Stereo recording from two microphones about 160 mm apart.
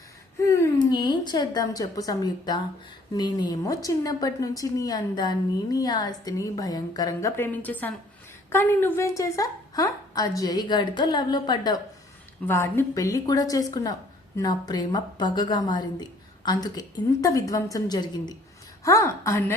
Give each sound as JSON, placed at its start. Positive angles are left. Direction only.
{"t": 0.4, "sound": "a woman's voice", "side_deg": 20}
{"t": 12.5, "sound": "a woman's voice", "side_deg": 15}